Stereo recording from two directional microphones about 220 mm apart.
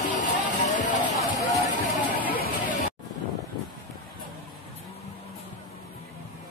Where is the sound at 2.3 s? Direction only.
40° left (ahead or behind).